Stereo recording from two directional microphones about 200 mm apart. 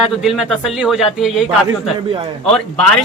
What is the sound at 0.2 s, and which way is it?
A man's voice, centre (ahead or behind).